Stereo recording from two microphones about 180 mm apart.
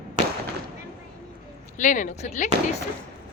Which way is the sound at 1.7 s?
45° left (ahead or behind).